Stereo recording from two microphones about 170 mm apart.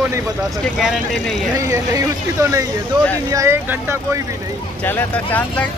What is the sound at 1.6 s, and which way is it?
Speech, 15° right (ahead or behind).